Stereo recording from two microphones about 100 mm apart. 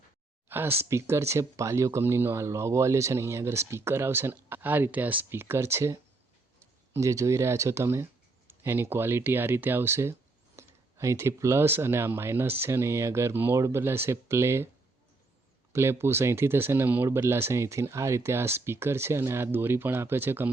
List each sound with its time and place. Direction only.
0.4 s a sound: 20° right (ahead or behind)
0.8 s speech: 25° right (ahead or behind)
15.7 s speech: 25° right (ahead or behind)